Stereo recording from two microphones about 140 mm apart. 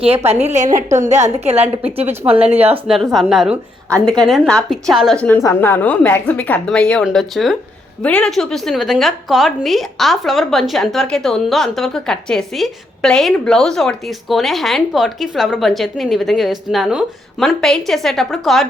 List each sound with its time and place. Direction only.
0.0 s a woman's voice: 45° right (ahead or behind)
0.4 s a woman's voice: 60° right (ahead or behind); by 2.3 s 45° right (ahead or behind)
2.8 s a woman's voice: centre (ahead or behind)
5.4 s a woman's voice: 20° left (ahead or behind); by 18.7 s centre (ahead or behind)